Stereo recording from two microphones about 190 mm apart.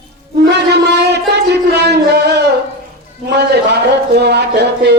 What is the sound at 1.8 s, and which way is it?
Music, 60° right (ahead or behind).